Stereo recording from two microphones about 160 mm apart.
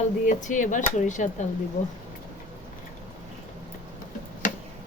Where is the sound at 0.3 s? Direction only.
50° left (ahead or behind).